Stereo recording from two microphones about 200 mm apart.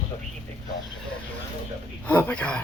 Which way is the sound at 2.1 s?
10° left (ahead or behind).